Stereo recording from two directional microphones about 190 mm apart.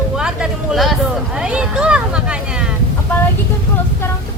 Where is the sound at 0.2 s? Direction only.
5° right (ahead or behind).